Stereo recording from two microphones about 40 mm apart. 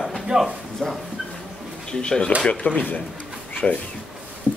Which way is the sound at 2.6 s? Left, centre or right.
Left.